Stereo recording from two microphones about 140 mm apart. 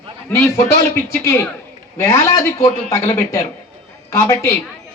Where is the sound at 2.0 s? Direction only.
25° left (ahead or behind).